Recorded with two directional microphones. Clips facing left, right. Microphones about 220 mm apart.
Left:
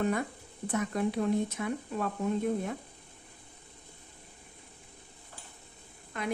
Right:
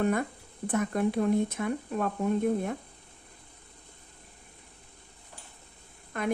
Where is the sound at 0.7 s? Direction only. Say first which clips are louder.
Right 3 dB; 50° right (ahead or behind).